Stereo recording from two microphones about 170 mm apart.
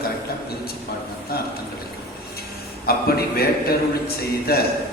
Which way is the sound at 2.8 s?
65° left (ahead or behind).